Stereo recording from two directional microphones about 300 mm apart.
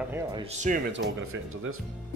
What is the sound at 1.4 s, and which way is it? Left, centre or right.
Speech, right.